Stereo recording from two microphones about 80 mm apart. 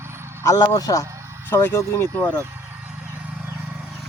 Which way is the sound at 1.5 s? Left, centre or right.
Left.